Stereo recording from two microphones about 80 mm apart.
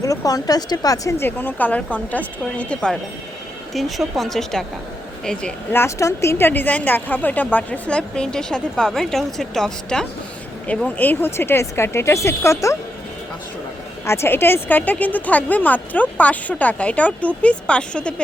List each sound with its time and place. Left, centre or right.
0.0 s a woman's voice: left
1.2 s speech: left
3.8 s a woman's voice: centre
5.7 s a woman's voice: left; by 10.1 s centre
10.8 s speech: left
14.0 s speech: left; by 18.1 s centre